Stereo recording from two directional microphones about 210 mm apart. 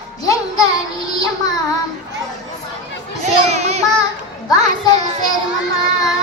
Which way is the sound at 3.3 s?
30° right (ahead or behind).